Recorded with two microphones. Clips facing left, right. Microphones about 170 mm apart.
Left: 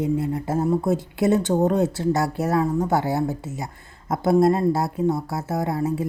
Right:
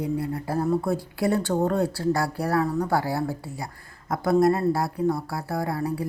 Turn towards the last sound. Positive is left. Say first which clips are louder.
# left 3 dB
turn(degrees=20)  # may be behind; listen again after turning